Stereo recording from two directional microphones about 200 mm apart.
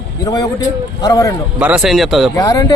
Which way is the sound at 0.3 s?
20° left (ahead or behind).